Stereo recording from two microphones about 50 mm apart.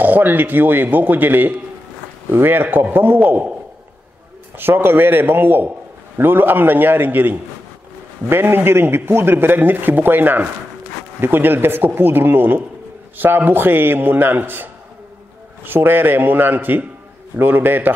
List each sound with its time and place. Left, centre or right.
0.0 s a man's voice: right
4.6 s a man's voice: right